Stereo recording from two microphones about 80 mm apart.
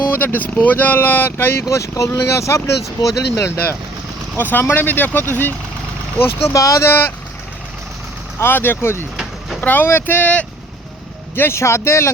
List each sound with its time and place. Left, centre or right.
0.1 s speech: left
4.4 s speech: left
6.5 s speech: left
6.8 s speech: left
8.4 s speech: left
11.3 s speech: left